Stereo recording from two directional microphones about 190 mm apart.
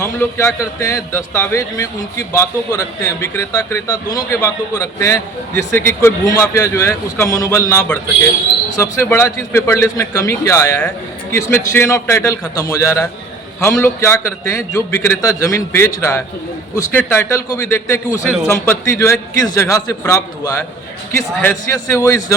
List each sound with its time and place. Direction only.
0.0 s a man's voice: 15° left (ahead or behind)